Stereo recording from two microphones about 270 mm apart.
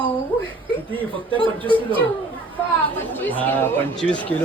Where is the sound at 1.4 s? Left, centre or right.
Centre.